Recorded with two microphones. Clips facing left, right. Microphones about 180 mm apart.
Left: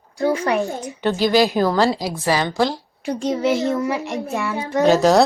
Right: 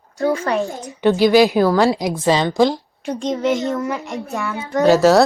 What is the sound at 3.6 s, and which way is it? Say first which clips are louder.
Speech: left 1 dB; 20° left (ahead or behind).